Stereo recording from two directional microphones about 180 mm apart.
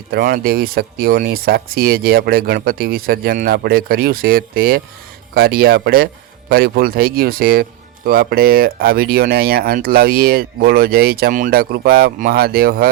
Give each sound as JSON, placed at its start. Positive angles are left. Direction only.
{"t": 0.1, "sound": "speech", "side_deg": -55}